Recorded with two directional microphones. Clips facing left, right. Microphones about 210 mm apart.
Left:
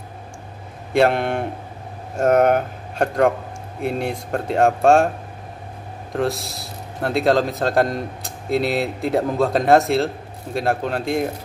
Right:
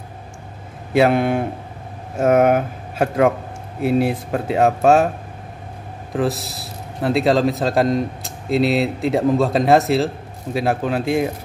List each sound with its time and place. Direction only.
0.9 s a man's voice: 5° right (ahead or behind)
6.1 s a man's voice: centre (ahead or behind)